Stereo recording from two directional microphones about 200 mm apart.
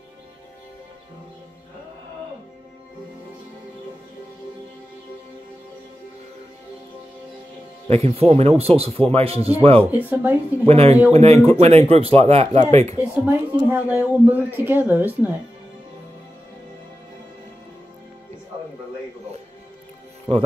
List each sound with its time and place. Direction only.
7.9 s speech: 30° right (ahead or behind)
9.8 s speech: 10° right (ahead or behind)
10.7 s speech: 30° right (ahead or behind)
13.3 s speech: 10° right (ahead or behind)